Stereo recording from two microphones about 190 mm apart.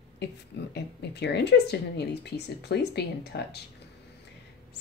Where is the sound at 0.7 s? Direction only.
60° left (ahead or behind).